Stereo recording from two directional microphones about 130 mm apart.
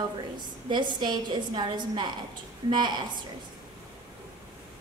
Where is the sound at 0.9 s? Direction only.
35° right (ahead or behind).